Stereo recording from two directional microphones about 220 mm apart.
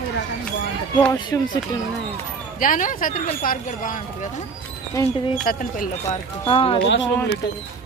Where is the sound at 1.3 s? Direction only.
15° left (ahead or behind).